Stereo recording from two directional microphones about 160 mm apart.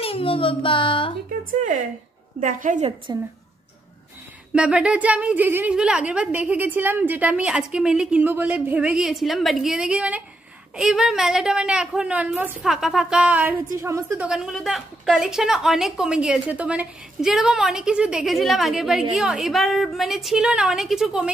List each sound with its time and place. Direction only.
0.0 s a child's voice: 35° left (ahead or behind)
1.5 s a woman's voice: 55° right (ahead or behind)
3.1 s a woman's voice: 25° right (ahead or behind)
4.6 s a woman's voice: 5° right (ahead or behind)
14.2 s a woman's voice: 5° right (ahead or behind)